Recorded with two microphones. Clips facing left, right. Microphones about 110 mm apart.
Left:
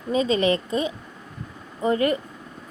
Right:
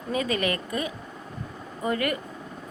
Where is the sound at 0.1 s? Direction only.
25° left (ahead or behind).